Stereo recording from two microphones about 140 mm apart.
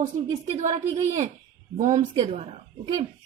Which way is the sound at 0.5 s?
50° right (ahead or behind).